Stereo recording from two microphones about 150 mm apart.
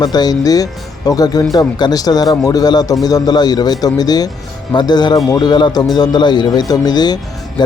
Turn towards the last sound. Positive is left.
turn(degrees=25)  # may be behind; listen again after turning